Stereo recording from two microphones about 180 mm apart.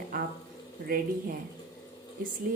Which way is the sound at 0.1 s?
50° right (ahead or behind).